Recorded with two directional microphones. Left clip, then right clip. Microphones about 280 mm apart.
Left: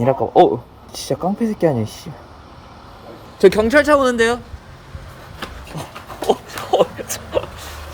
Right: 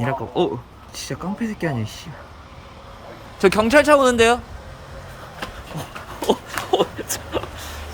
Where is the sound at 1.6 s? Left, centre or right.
Centre.